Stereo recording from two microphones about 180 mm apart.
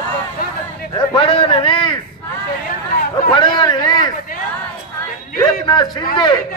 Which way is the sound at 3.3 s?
25° left (ahead or behind).